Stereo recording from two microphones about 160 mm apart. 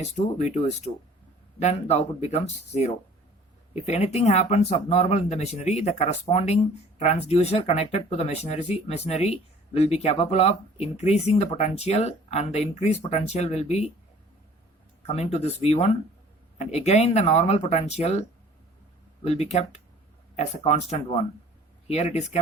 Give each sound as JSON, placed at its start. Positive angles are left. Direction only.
{"t": 0.0, "sound": "speech", "side_deg": 45}
{"t": 15.0, "sound": "speech", "side_deg": 40}